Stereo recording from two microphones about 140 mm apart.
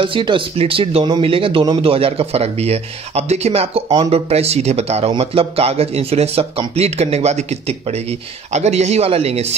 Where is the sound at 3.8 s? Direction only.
35° right (ahead or behind).